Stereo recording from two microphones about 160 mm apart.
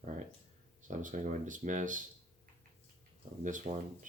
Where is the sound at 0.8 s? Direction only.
50° right (ahead or behind).